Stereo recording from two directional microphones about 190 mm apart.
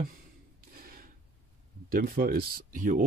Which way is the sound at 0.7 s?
50° right (ahead or behind).